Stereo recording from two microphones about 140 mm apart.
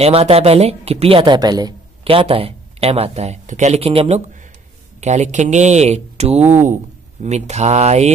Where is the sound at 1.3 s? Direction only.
30° right (ahead or behind).